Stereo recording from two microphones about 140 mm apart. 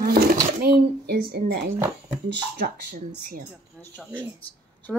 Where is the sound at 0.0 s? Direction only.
90° right.